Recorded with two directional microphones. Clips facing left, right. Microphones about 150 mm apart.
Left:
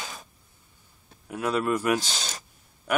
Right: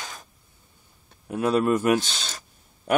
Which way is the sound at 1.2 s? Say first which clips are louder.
Right 4 dB; 30° right (ahead or behind).